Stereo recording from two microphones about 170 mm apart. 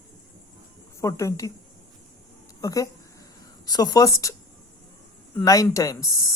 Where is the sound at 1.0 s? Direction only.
20° left (ahead or behind).